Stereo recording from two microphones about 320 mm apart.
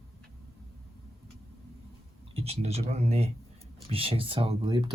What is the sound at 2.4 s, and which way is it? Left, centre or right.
Speech, centre.